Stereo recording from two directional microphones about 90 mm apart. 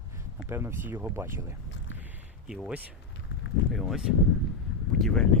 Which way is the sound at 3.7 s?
Centre (ahead or behind).